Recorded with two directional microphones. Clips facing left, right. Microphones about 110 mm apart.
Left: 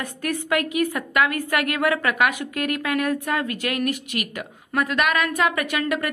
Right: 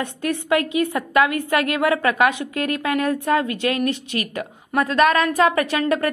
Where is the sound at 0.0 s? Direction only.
25° right (ahead or behind).